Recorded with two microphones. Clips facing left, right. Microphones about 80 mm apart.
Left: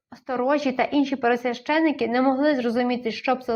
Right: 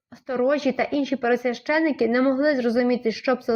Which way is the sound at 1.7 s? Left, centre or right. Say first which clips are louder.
Even; right.